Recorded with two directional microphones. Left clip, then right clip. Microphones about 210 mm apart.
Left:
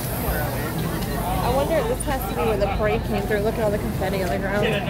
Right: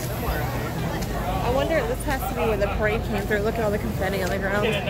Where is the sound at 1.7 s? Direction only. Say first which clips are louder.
Left 2 dB; 15° right (ahead or behind).